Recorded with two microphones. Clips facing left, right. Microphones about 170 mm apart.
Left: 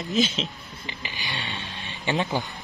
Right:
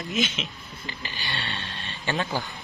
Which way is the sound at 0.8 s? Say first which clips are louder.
Even; 15° left (ahead or behind).